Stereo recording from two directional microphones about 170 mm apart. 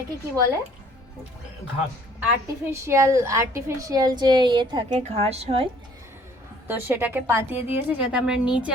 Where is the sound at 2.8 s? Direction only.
15° right (ahead or behind).